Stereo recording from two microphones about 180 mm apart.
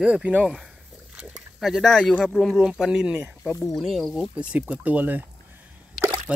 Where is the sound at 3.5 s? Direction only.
20° left (ahead or behind).